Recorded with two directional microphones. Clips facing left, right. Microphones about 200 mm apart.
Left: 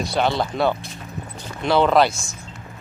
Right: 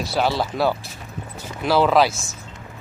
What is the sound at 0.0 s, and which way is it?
A man's voice, 5° right (ahead or behind).